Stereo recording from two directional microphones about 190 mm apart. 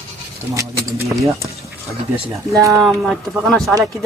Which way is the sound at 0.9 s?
15° right (ahead or behind).